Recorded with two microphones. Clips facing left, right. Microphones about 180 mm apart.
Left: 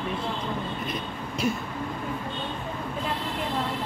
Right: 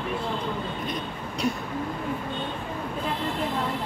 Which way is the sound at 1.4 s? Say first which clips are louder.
Even; centre (ahead or behind).